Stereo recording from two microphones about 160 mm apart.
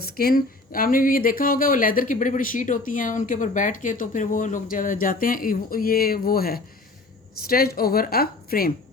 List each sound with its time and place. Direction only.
0.0 s a woman's voice: 70° left (ahead or behind)